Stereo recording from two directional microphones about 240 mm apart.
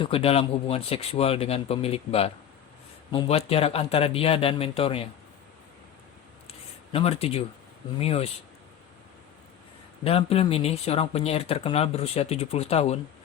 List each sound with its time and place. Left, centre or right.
0.0 s speech: left
6.5 s a sound: left
7.9 s speech: left
10.0 s speech: left